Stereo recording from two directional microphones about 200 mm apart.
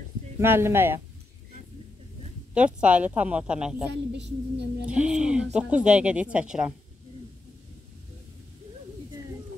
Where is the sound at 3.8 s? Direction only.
60° right (ahead or behind).